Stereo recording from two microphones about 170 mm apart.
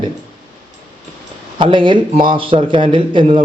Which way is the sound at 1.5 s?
30° right (ahead or behind).